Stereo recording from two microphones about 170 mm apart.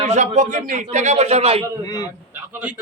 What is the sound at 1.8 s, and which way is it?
Speech, 20° left (ahead or behind).